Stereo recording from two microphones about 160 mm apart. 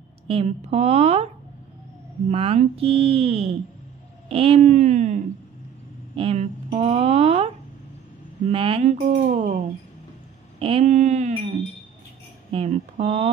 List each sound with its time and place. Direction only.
0.3 s speech: 40° right (ahead or behind)
10.6 s speech: 40° right (ahead or behind)
12.4 s speech: 40° right (ahead or behind)